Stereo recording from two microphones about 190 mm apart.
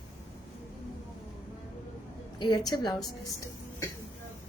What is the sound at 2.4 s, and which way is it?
Speech, 20° left (ahead or behind).